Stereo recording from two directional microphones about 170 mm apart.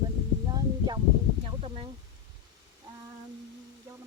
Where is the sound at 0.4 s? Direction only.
25° right (ahead or behind).